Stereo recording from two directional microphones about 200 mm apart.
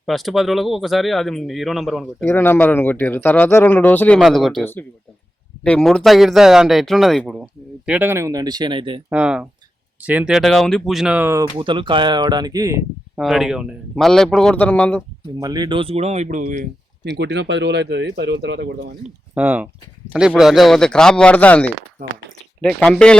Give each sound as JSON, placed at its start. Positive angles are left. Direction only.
{"t": 0.0, "sound": "speech", "side_deg": 0}
{"t": 2.2, "sound": "speech", "side_deg": 10}
{"t": 9.0, "sound": "speech", "side_deg": -5}
{"t": 11.5, "sound": "speech", "side_deg": -25}
{"t": 13.1, "sound": "speech", "side_deg": 0}
{"t": 15.4, "sound": "speech", "side_deg": -20}
{"t": 17.2, "sound": "speech", "side_deg": -60}
{"t": 19.3, "sound": "speech", "side_deg": -10}